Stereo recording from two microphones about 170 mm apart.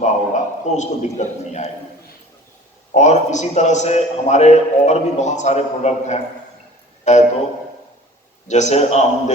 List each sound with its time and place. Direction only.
0.0 s a sound: 45° left (ahead or behind)
2.9 s a man's voice: 45° left (ahead or behind)
8.4 s a man's voice: 45° left (ahead or behind)